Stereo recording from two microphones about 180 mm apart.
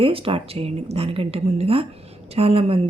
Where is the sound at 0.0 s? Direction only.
30° right (ahead or behind).